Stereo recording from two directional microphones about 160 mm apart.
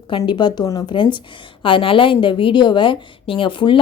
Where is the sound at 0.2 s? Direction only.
30° left (ahead or behind).